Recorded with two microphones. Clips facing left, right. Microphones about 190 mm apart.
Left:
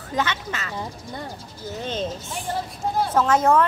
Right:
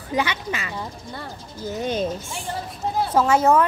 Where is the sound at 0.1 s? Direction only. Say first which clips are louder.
Right 2 dB; 10° right (ahead or behind).